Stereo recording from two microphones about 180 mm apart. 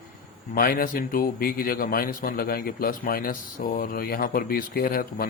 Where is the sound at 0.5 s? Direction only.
50° left (ahead or behind).